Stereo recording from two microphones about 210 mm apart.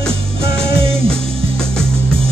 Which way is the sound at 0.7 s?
25° right (ahead or behind).